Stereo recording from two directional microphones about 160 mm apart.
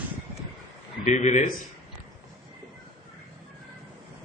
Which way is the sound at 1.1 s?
45° left (ahead or behind).